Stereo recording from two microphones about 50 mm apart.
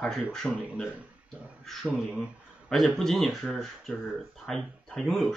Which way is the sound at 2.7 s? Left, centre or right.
Centre.